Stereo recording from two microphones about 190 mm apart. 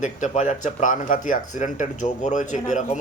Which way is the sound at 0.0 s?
40° left (ahead or behind).